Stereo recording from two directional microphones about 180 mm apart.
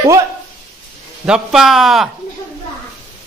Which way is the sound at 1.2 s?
5° right (ahead or behind).